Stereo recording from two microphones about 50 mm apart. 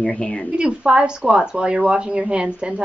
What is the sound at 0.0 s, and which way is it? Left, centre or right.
Speech, left.